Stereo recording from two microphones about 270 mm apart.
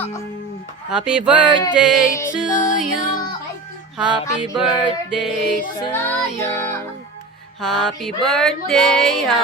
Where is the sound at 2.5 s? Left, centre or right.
Left.